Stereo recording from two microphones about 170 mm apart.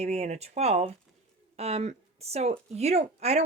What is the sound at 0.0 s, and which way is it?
Speech, 40° right (ahead or behind).